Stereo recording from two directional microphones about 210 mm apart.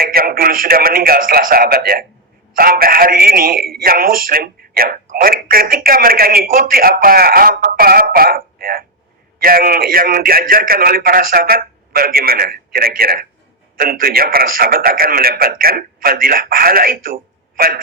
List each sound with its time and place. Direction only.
0.0 s speech: 45° right (ahead or behind)